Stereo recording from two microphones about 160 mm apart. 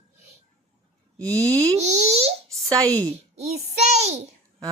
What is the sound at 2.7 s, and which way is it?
Speech, 20° right (ahead or behind).